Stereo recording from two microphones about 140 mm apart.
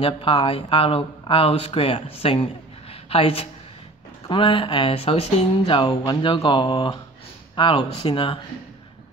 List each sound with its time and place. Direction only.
0.0 s speech: 40° left (ahead or behind)